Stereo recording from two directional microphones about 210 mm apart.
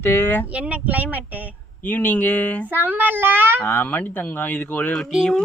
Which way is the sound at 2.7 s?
10° right (ahead or behind).